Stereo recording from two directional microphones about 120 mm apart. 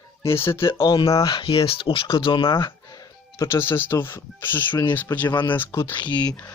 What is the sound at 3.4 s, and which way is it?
Speech, 20° left (ahead or behind).